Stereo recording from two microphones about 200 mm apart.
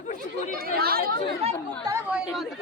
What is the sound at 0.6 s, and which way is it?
Speech, 50° right (ahead or behind).